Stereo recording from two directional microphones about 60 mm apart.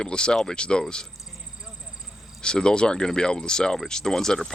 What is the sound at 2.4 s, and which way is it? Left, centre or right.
Speech, centre.